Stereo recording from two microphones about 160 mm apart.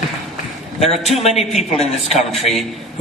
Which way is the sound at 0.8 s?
40° left (ahead or behind).